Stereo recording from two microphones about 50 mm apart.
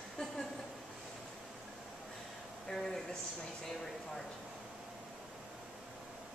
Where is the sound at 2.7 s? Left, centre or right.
Centre.